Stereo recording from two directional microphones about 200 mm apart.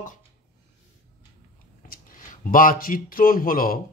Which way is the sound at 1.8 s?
45° left (ahead or behind).